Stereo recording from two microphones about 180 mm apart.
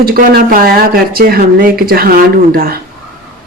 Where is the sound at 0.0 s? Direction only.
55° right (ahead or behind).